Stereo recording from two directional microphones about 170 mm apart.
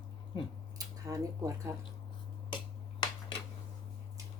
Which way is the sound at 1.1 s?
20° right (ahead or behind).